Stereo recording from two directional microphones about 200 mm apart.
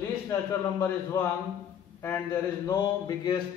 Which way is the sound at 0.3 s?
15° left (ahead or behind).